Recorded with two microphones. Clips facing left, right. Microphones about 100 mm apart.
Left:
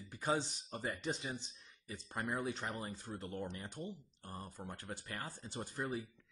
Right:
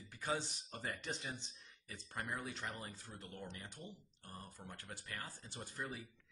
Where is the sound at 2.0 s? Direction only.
35° left (ahead or behind).